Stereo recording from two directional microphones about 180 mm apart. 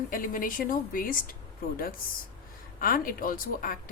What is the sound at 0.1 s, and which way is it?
A woman's voice, 50° left (ahead or behind).